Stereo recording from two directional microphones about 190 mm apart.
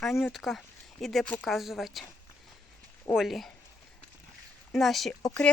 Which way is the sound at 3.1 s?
Centre (ahead or behind).